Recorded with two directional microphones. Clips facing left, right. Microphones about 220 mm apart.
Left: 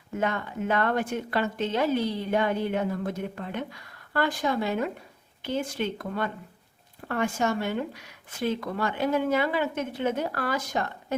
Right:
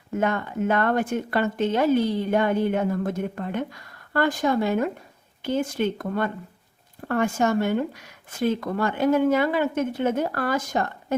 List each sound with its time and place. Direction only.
0.2 s a woman's voice: 50° right (ahead or behind)